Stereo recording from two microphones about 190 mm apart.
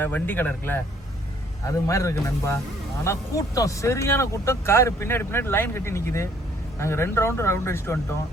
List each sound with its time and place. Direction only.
0.0 s speech: 10° left (ahead or behind)